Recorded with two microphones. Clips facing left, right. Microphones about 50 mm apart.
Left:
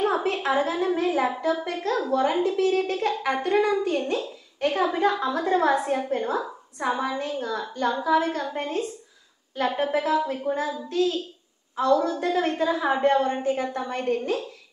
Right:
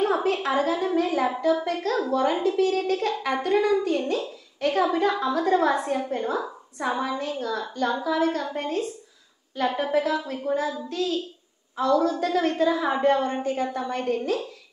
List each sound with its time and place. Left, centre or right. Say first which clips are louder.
0.0 s a sound: right 1 dB; centre
0.6 s a woman's voice: right 1 dB; centre
12.6 s a woman's voice: left 1 dB; centre